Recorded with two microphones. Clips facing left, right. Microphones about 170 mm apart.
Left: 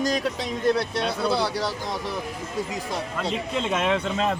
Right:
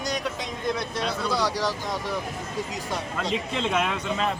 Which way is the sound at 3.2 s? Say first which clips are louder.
Even; centre (ahead or behind).